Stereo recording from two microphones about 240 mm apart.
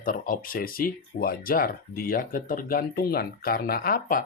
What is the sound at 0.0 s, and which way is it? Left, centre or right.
Speech, left.